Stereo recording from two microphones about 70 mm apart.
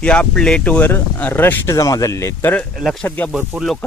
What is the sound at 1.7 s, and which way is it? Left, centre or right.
Speech, left.